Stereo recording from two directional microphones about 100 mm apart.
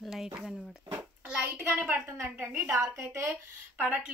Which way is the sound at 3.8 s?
10° right (ahead or behind).